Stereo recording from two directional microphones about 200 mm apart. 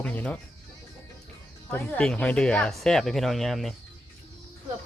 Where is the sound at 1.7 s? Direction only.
10° left (ahead or behind).